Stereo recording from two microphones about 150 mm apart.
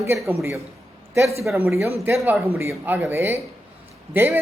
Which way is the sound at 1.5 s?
15° right (ahead or behind).